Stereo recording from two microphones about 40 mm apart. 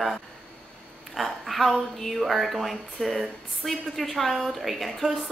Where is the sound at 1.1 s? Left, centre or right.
Centre.